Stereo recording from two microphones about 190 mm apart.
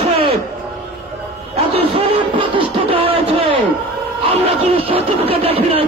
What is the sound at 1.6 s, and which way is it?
Music, 30° right (ahead or behind).